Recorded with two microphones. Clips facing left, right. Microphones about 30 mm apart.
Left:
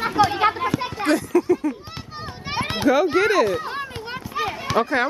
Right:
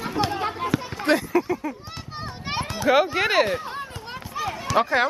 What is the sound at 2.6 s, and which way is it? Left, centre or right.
Children playing, left.